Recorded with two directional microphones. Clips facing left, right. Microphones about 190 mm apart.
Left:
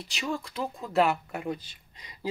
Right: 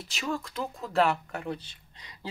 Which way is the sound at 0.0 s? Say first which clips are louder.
Even; centre (ahead or behind).